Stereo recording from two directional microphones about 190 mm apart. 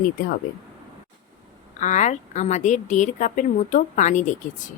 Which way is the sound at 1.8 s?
40° left (ahead or behind).